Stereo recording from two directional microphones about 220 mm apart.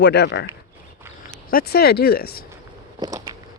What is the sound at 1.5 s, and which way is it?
Speech, 45° left (ahead or behind).